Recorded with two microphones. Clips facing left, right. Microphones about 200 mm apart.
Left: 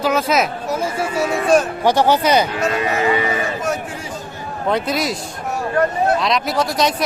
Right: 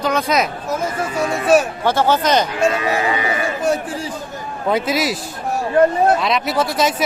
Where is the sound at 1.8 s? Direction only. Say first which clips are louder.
Left 2 dB; 15° left (ahead or behind).